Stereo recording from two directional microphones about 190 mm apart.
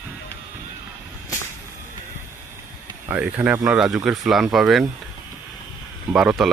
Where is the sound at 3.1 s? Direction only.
5° right (ahead or behind).